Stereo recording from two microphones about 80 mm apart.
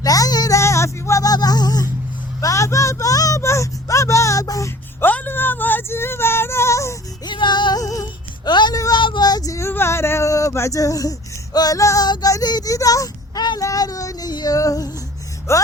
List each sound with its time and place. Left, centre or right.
0.0 s a sound: left
0.6 s music: left
2.4 s a sound: left
4.9 s female singing: left
7.3 s music: left
7.8 s music: left
8.4 s a sound: left
8.7 s a sound: left
9.0 s speech: left
11.5 s child singing: left
12.0 s child singing: left
12.3 s speech: left
13.6 s child singing: left
15.5 s speech: left